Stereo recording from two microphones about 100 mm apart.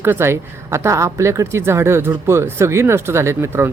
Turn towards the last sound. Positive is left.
turn(degrees=-25)  # may be behind; listen again after turning